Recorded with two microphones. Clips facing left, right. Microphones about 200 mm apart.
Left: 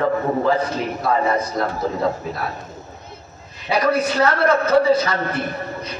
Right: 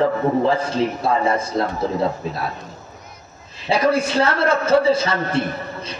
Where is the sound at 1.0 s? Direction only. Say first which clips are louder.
Left 3 dB; 30° right (ahead or behind).